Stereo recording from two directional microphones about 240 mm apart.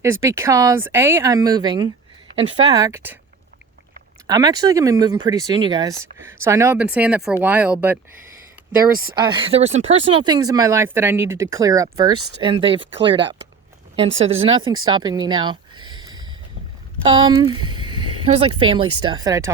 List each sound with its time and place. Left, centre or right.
0.0 s speech: centre
2.3 s a sound: right
2.6 s speech: centre
4.3 s speech: centre
9.1 s speech: centre
12.1 s speech: right
12.4 s speech: right
17.7 s a sound: centre
18.6 s speech: right